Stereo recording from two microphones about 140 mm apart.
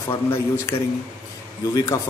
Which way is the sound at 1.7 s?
25° left (ahead or behind).